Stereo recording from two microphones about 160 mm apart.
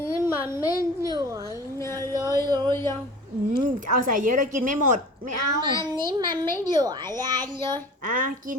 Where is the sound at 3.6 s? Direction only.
55° right (ahead or behind).